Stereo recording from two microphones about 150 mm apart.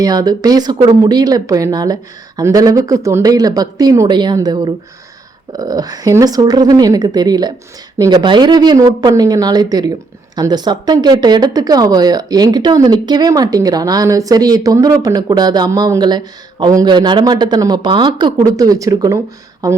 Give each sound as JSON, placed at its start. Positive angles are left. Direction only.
{"t": 0.0, "sound": "speech", "side_deg": -25}